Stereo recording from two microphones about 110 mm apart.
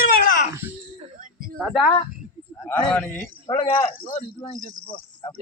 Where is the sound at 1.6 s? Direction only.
Centre (ahead or behind).